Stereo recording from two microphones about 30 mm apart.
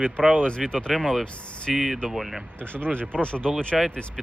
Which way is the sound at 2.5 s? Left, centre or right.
Left.